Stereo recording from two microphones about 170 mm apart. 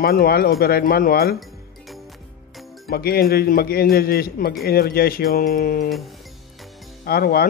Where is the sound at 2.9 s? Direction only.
65° left (ahead or behind).